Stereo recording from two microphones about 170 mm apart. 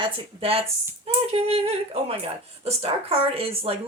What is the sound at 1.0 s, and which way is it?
Speech, 35° right (ahead or behind).